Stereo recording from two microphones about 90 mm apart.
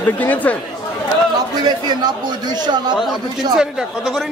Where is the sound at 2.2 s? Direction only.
50° right (ahead or behind).